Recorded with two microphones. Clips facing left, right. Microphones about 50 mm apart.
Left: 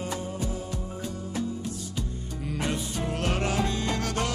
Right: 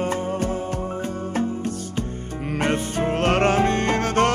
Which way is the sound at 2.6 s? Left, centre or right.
Right.